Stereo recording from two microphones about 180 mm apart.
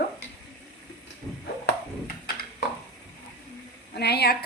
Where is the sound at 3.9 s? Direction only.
65° left (ahead or behind).